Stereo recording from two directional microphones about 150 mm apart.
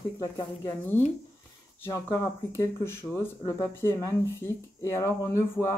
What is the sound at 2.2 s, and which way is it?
Speech, 20° left (ahead or behind).